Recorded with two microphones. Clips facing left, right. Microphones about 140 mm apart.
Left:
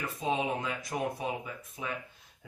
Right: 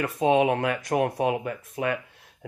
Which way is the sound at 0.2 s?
70° right (ahead or behind).